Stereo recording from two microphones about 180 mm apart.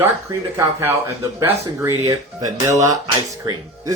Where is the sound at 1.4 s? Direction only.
15° right (ahead or behind).